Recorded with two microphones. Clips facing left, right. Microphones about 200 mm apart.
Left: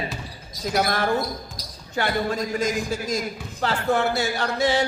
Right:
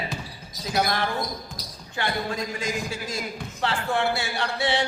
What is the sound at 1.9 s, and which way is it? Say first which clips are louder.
A man's voice: left 4 dB; 40° left (ahead or behind).